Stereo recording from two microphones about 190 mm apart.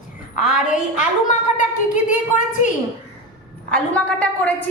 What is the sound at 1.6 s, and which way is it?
A woman's voice, 40° left (ahead or behind).